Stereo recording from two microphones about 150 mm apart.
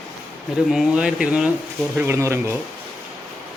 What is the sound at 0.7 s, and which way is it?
Speech, 5° right (ahead or behind).